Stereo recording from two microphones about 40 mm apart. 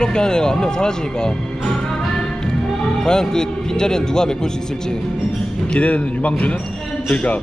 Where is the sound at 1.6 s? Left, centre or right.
Centre.